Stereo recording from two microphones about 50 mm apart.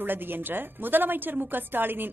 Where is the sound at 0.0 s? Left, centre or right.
Right.